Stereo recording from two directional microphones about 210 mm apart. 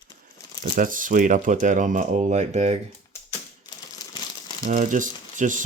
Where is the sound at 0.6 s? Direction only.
40° right (ahead or behind).